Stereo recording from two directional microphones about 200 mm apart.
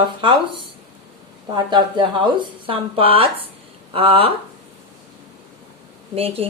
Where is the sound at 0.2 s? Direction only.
25° right (ahead or behind).